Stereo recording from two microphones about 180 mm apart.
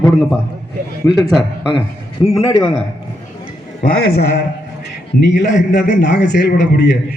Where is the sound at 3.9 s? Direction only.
65° left (ahead or behind).